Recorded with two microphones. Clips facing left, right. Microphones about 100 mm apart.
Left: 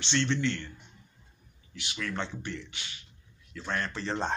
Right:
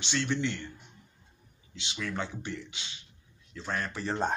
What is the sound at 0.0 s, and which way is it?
Speech, 10° right (ahead or behind).